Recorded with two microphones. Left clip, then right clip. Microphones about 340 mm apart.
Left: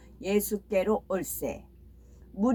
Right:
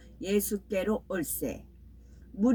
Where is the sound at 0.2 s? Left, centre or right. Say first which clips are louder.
Left 2 dB; centre.